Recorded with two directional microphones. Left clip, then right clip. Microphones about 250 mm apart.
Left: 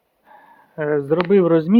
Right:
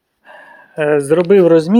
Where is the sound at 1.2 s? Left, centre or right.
Centre.